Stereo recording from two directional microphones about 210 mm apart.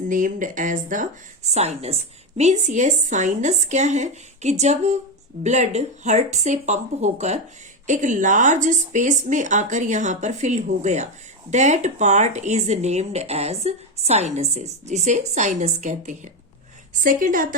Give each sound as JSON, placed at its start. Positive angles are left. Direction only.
{"t": 0.1, "sound": "speech", "side_deg": -40}